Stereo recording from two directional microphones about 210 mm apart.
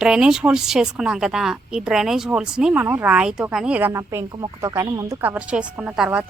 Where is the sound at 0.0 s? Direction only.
5° right (ahead or behind).